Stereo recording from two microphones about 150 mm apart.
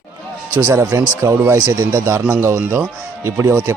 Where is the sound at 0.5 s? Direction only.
15° right (ahead or behind).